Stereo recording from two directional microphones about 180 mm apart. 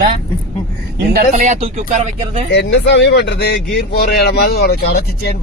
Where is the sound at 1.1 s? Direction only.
40° right (ahead or behind).